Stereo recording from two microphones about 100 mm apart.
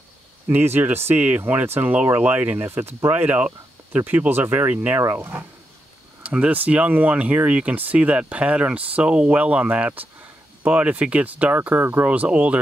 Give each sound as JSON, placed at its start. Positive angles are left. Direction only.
{"t": 0.5, "sound": "speech", "side_deg": -20}